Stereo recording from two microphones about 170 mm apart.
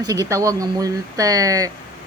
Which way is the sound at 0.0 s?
20° right (ahead or behind).